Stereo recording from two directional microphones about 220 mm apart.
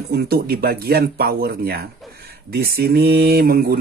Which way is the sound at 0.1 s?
45° right (ahead or behind).